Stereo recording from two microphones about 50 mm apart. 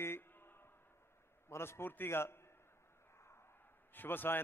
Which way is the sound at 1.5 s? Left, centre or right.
Left.